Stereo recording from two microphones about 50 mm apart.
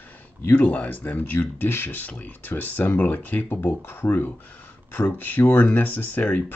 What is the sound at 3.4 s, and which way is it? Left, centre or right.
Speech, left.